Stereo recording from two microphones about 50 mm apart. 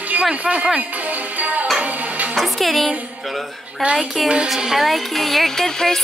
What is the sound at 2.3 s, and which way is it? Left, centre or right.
Speech, centre.